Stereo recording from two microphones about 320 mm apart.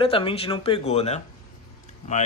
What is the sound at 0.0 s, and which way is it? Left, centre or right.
Speech, centre.